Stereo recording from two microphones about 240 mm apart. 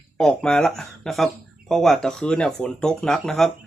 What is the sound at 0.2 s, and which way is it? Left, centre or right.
Speech, centre.